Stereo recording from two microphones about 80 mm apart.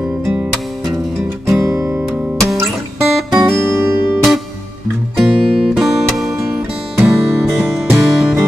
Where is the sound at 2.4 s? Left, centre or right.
Right.